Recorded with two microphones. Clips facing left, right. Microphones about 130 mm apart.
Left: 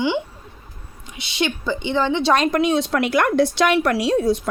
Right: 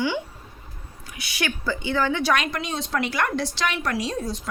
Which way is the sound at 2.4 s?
55° left (ahead or behind).